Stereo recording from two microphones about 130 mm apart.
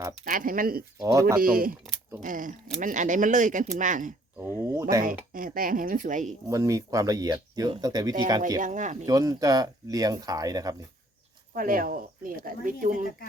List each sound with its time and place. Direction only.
0.3 s speech: 90° right
1.0 s speech: 25° right (ahead or behind)
1.4 s speech: 90° right
2.8 s speech: 75° right (ahead or behind)
4.8 s speech: 25° right (ahead or behind)
5.3 s speech: 90° right
6.5 s speech: 25° right (ahead or behind)
8.6 s speech: 75° right (ahead or behind)
9.0 s speech: 30° right (ahead or behind)
11.5 s speech: 90° right